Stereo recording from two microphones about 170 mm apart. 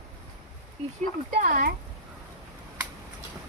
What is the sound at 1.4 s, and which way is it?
Speech, 55° right (ahead or behind).